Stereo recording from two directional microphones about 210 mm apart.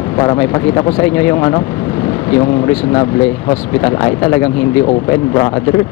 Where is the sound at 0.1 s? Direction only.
20° left (ahead or behind).